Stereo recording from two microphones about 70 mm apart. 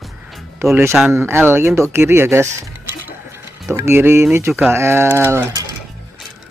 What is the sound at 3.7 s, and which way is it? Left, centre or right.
Speech, right.